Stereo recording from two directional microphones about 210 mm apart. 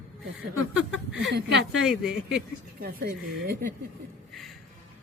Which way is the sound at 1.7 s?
5° right (ahead or behind).